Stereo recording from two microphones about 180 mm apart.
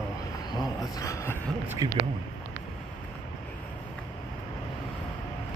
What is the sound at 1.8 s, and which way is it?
Speech, 20° right (ahead or behind).